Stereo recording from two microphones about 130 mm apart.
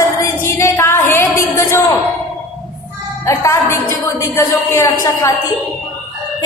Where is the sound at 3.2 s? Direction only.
20° left (ahead or behind).